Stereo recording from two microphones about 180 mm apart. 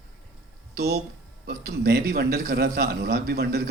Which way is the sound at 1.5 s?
60° right (ahead or behind).